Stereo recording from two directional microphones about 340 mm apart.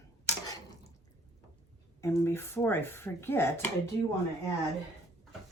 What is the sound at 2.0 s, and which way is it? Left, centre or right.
Speech, centre.